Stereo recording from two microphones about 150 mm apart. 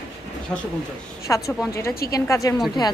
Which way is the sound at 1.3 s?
20° left (ahead or behind).